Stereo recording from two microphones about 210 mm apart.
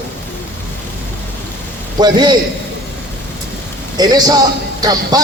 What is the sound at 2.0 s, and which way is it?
Speech, 20° right (ahead or behind).